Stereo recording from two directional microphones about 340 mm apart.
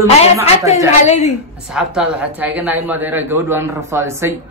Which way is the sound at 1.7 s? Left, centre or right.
Centre.